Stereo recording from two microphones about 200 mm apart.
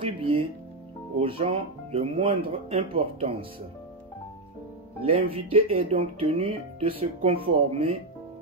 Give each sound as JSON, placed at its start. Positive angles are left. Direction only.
{"t": 0.0, "sound": "speech", "side_deg": -25}
{"t": 5.0, "sound": "speech", "side_deg": -30}